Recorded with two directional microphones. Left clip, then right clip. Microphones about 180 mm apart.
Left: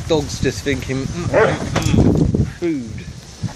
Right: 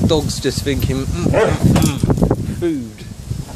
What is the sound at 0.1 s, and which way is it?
Speech, 5° right (ahead or behind).